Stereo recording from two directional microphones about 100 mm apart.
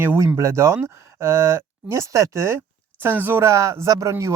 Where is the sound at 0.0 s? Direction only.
20° right (ahead or behind).